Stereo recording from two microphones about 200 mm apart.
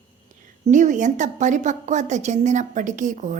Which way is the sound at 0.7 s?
40° right (ahead or behind).